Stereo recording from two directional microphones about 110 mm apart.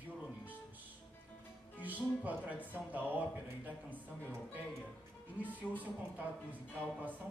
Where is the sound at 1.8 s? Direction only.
15° right (ahead or behind).